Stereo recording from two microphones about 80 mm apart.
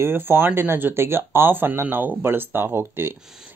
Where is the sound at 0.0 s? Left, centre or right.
Right.